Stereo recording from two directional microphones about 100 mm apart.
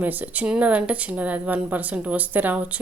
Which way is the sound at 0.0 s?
15° right (ahead or behind).